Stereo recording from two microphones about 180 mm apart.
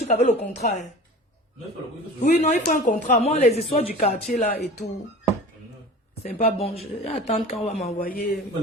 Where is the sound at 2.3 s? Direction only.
40° left (ahead or behind).